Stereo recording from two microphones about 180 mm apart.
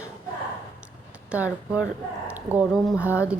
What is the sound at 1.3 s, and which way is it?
Speech, 5° right (ahead or behind).